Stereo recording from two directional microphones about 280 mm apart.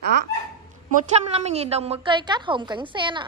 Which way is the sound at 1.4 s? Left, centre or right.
Right.